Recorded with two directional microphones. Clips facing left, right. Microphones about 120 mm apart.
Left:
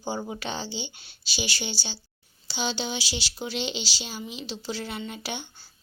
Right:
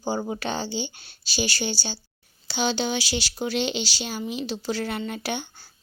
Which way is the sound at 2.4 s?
60° right (ahead or behind).